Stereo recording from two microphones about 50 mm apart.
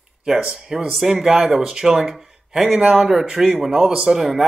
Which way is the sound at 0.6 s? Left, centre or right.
Centre.